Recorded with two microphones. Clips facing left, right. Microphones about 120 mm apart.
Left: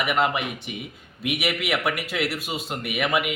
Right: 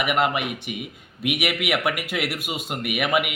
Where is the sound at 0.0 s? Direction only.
5° right (ahead or behind).